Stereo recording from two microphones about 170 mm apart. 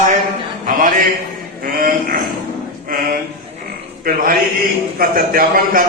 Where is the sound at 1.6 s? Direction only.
55° right (ahead or behind).